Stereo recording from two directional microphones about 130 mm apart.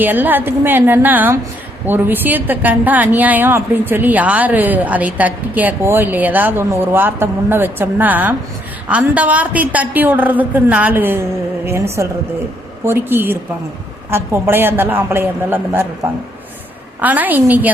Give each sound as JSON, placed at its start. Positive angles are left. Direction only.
{"t": 0.0, "sound": "a woman's voice", "side_deg": -15}
{"t": 17.0, "sound": "a woman's voice", "side_deg": -15}